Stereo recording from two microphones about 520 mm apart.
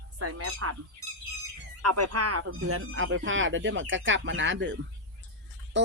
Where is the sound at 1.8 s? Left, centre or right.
Right.